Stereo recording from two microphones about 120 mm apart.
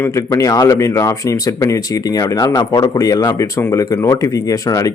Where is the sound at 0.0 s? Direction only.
30° left (ahead or behind).